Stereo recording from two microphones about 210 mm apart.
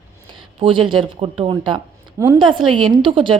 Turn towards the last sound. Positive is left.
turn(degrees=-25)  # may be behind; listen again after turning